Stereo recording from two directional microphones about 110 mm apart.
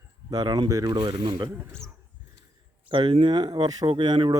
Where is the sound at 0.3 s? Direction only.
35° right (ahead or behind).